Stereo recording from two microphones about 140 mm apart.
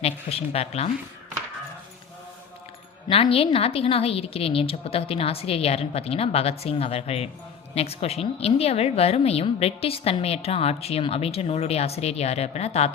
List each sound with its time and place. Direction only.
0.0 s a woman's voice: 45° left (ahead or behind)
3.1 s a woman's voice: 45° left (ahead or behind)